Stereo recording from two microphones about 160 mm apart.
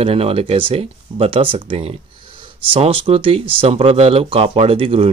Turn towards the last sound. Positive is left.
turn(degrees=-35)  # may be behind; listen again after turning